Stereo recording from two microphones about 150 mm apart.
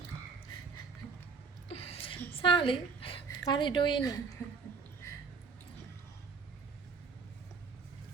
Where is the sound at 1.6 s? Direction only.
40° left (ahead or behind).